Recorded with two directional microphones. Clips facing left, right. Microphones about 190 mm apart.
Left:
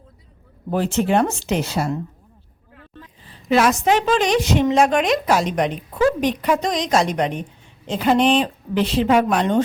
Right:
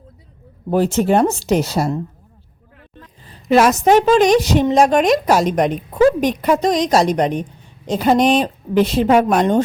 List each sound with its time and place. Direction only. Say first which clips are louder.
0.7 s a woman's voice: right 4 dB; 40° right (ahead or behind)
3.5 s a woman's voice: right 5 dB; 40° right (ahead or behind)